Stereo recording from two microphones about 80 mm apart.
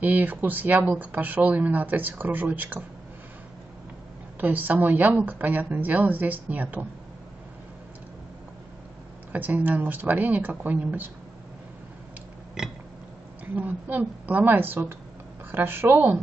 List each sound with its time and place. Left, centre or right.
0.0 s speech: right
4.4 s speech: right
9.3 s speech: right
13.6 s speech: right